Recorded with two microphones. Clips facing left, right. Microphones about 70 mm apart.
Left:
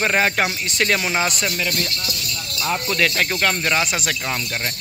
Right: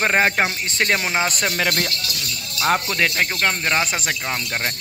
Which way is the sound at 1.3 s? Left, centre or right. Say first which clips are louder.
Right 1 dB; right.